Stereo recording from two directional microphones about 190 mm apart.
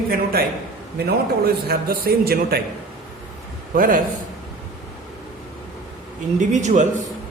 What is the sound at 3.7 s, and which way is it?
Speech, 45° right (ahead or behind).